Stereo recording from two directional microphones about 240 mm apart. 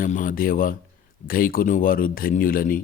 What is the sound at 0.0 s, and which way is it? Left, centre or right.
A man's voice, left.